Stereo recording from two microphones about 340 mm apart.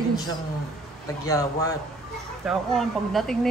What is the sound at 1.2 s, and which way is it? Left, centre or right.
A woman's voice, centre.